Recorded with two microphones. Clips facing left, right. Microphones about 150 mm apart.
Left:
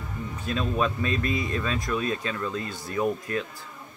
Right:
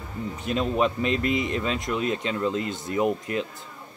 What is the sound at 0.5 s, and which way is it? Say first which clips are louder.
Speech: right 3 dB; 20° right (ahead or behind).